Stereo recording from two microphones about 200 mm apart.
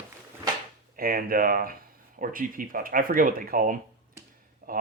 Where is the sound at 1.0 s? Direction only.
45° right (ahead or behind).